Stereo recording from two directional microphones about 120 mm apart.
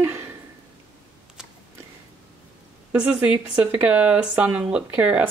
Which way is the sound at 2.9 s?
10° right (ahead or behind).